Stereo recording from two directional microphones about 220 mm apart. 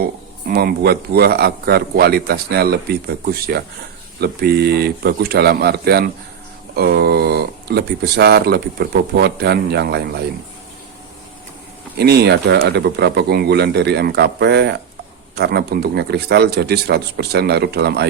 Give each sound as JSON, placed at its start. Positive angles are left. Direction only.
{"t": 0.0, "sound": "speech", "side_deg": -45}
{"t": 11.9, "sound": "speech", "side_deg": -45}